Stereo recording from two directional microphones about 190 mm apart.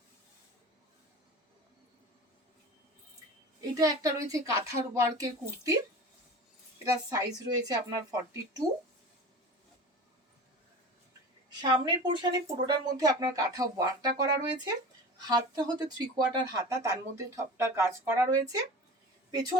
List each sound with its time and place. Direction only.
3.8 s speech: 20° right (ahead or behind)
7.1 s speech: 20° right (ahead or behind)
11.6 s speech: 25° right (ahead or behind)